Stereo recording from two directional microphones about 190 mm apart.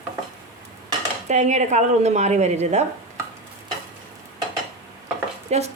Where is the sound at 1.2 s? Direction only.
40° right (ahead or behind).